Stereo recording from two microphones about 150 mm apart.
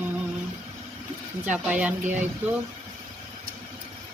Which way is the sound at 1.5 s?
10° right (ahead or behind).